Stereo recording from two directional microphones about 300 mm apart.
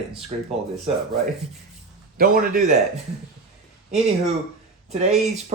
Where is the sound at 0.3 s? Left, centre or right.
Right.